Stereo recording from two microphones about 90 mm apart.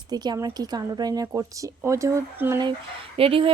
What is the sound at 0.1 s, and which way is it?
Speech, 50° right (ahead or behind).